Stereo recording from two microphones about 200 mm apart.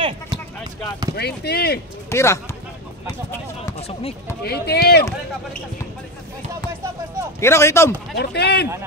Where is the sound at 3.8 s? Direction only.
30° left (ahead or behind).